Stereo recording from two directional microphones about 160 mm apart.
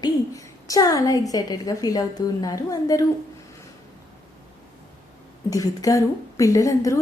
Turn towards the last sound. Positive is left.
turn(degrees=20)  # may be behind; listen again after turning